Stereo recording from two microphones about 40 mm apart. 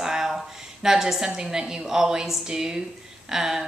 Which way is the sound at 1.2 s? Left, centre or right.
Centre.